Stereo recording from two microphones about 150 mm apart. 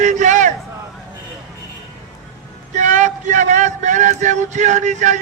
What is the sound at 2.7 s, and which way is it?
Speech, 55° right (ahead or behind).